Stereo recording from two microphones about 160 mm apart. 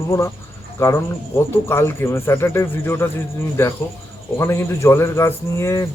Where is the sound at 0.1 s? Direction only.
15° left (ahead or behind).